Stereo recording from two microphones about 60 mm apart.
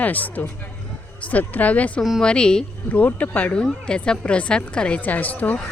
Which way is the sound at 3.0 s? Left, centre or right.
Left.